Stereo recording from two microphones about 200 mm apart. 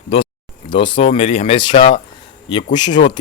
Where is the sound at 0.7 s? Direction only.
25° left (ahead or behind).